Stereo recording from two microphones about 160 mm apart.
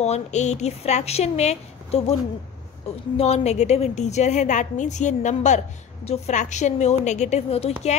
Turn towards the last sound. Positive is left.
turn(degrees=40)  # may be behind; listen again after turning